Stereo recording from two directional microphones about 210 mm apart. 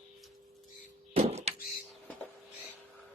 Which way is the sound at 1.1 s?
30° right (ahead or behind).